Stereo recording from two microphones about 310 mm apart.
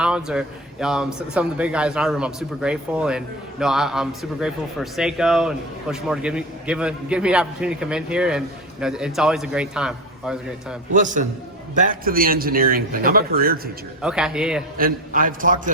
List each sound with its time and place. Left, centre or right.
0.0 s a man's voice: centre
10.9 s a man's voice: right
14.0 s a man's voice: centre
14.8 s a man's voice: right